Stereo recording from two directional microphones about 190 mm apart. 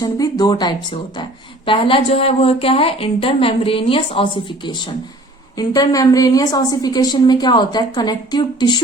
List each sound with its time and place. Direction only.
0.0 s a woman's voice: 20° left (ahead or behind)